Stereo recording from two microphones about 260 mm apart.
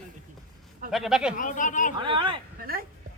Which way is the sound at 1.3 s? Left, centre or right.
Left.